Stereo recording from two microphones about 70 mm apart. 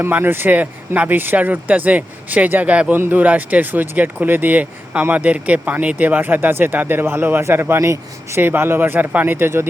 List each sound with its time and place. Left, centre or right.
0.0 s speech: right